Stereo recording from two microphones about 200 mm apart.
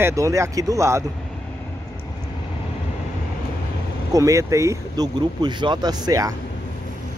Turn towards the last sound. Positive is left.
turn(degrees=-15)  # may be behind; listen again after turning